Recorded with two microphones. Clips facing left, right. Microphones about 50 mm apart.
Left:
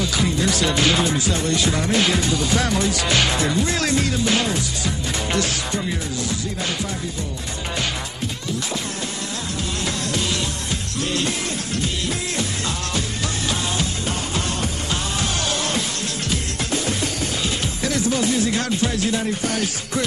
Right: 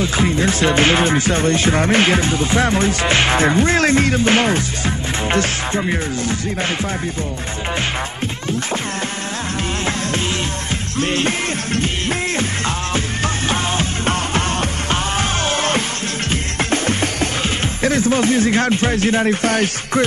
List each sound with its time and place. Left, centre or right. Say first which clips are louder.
0.0 s music: right 4 dB; right
11.0 s music: right 6 dB; right
17.8 s speech: right 6 dB; right